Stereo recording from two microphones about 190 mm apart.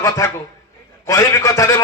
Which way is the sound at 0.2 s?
15° left (ahead or behind).